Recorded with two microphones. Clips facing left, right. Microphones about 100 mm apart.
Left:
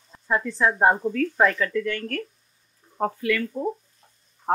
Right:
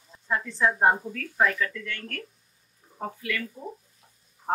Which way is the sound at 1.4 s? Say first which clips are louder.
Left 1 dB; 50° left (ahead or behind).